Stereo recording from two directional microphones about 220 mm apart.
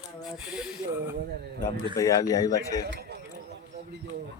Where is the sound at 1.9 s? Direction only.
15° left (ahead or behind).